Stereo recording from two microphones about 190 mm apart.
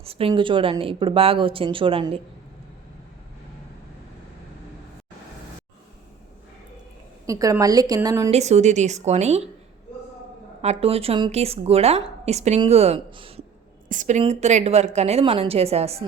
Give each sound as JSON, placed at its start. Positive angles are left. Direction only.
{"t": 0.0, "sound": "speech", "side_deg": -30}
{"t": 7.3, "sound": "speech", "side_deg": -15}
{"t": 8.3, "sound": "a woman's voice", "side_deg": -35}
{"t": 10.6, "sound": "a woman's voice", "side_deg": -35}
{"t": 13.8, "sound": "a woman's voice", "side_deg": -45}